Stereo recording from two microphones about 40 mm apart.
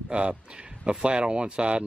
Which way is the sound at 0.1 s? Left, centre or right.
Right.